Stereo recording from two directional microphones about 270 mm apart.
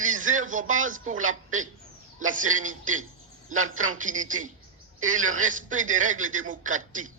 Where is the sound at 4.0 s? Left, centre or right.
Right.